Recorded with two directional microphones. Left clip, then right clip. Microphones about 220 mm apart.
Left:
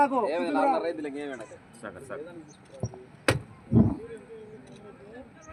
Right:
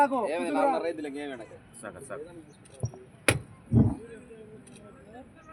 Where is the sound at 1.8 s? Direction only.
15° right (ahead or behind).